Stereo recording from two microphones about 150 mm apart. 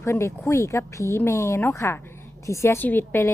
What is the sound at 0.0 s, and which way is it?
Speech, 20° left (ahead or behind).